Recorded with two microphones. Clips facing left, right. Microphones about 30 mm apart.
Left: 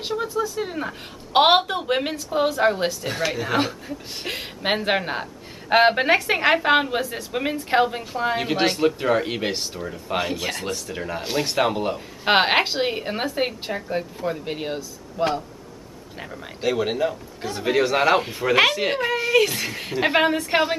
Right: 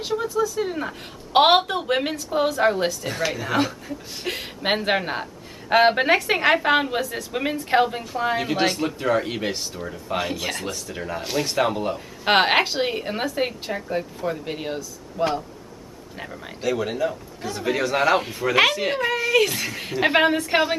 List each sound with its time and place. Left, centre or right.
0.6 s a woman's voice: centre
16.6 s a man's voice: centre
19.1 s a woman's voice: centre